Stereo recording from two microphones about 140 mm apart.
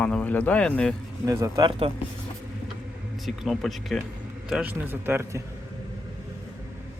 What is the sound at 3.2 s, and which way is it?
Speech, centre (ahead or behind).